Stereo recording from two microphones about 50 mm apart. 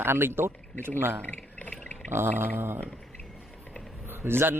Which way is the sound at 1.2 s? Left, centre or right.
Left.